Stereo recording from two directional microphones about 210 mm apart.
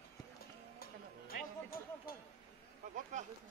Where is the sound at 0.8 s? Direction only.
45° left (ahead or behind).